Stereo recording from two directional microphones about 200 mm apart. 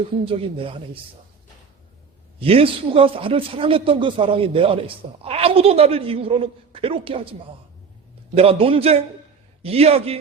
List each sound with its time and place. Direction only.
0.3 s a man's voice: 25° right (ahead or behind)
2.4 s a man's voice: 30° right (ahead or behind)
8.4 s a man's voice: 30° right (ahead or behind)